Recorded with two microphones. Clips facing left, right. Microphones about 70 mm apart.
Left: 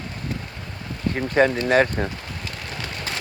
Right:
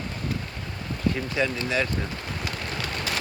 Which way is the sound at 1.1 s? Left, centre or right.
Left.